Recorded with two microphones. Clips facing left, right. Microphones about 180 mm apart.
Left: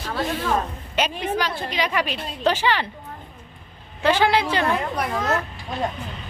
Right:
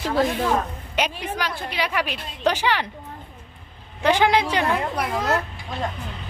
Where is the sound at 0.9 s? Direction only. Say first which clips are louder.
Left 2 dB; 10° right (ahead or behind).